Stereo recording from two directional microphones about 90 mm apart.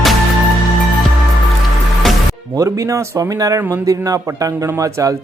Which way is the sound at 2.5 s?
40° right (ahead or behind).